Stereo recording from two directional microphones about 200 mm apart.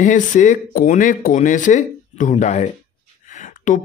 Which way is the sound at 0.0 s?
40° left (ahead or behind).